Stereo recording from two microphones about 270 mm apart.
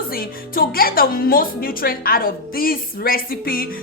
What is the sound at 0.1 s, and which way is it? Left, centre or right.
A woman's voice, left.